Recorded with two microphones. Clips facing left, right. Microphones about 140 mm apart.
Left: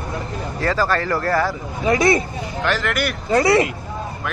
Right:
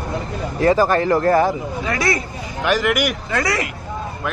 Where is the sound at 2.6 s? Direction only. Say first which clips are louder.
Right 4 dB; 10° right (ahead or behind).